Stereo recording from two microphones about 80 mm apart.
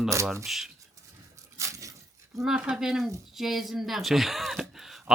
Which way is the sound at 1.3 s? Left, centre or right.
Right.